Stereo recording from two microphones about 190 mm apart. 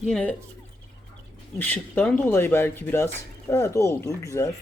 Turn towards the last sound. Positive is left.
turn(degrees=15)  # may be behind; listen again after turning